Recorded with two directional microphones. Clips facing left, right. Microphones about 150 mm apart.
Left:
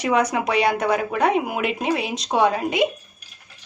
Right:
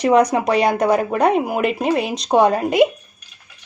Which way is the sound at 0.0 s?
35° right (ahead or behind).